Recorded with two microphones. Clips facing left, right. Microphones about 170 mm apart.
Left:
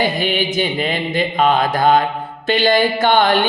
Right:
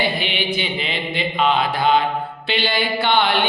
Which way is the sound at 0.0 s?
45° left (ahead or behind).